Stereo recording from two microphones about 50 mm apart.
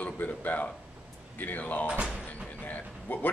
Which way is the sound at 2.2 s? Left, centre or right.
Left.